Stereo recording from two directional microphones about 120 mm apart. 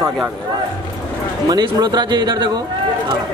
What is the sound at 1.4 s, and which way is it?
A man's voice, 35° right (ahead or behind).